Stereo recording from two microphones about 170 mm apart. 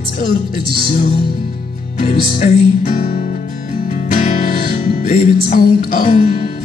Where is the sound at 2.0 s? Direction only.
45° left (ahead or behind).